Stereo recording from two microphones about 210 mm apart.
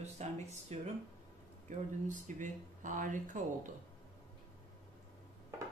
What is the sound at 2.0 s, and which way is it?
Speech, 35° right (ahead or behind).